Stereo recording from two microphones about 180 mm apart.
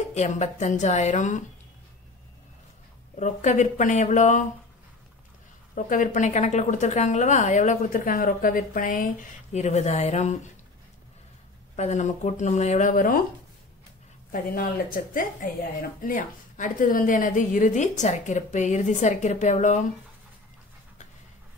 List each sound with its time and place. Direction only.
0.1 s speech: 40° left (ahead or behind)
3.2 s speech: 40° left (ahead or behind)
5.8 s speech: 45° left (ahead or behind)
11.7 s speech: 40° left (ahead or behind)
14.3 s speech: 50° left (ahead or behind)